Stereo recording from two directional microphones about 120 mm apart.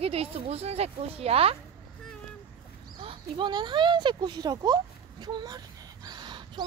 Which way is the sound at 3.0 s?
45° right (ahead or behind).